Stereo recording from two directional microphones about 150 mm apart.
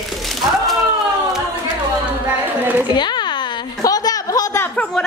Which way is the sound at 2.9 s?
30° left (ahead or behind).